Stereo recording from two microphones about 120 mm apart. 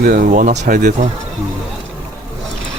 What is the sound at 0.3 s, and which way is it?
Speech, 85° right.